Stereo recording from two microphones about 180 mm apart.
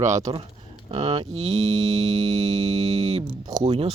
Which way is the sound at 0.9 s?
30° right (ahead or behind).